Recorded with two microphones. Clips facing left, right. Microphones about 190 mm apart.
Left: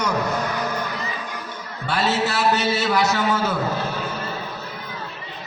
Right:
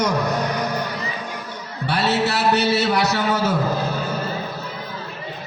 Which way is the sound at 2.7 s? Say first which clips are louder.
Right 1 dB; 35° right (ahead or behind).